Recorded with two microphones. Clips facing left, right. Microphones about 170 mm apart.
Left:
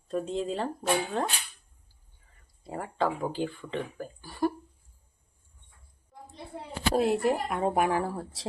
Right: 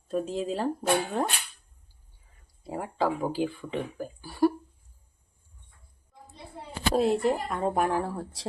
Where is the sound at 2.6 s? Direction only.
5° right (ahead or behind).